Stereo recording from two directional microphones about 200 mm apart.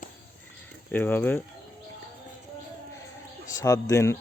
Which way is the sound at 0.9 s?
10° left (ahead or behind).